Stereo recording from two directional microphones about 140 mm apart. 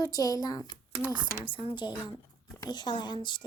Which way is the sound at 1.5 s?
35° left (ahead or behind).